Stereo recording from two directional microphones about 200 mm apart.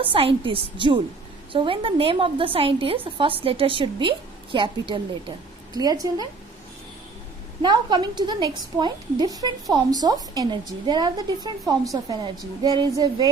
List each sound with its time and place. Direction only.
0.0 s a woman's voice: 25° right (ahead or behind)
7.6 s a woman's voice: 20° right (ahead or behind)